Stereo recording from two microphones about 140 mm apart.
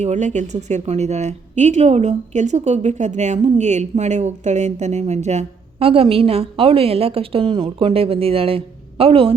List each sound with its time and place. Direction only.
0.0 s speech: 55° right (ahead or behind)